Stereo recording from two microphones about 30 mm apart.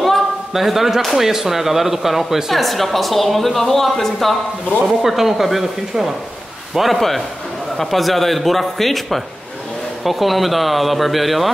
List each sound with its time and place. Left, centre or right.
0.5 s speech: centre
2.5 s a woman's voice: centre
4.8 s speech: centre
7.0 s a woman's voice: centre